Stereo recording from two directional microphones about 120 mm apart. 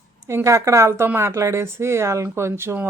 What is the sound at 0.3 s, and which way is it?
A woman's voice, 25° right (ahead or behind).